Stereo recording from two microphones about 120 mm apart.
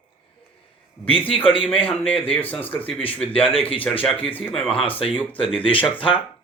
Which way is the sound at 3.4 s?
50° left (ahead or behind).